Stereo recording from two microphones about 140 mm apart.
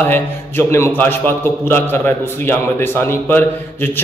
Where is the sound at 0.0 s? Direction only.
15° left (ahead or behind).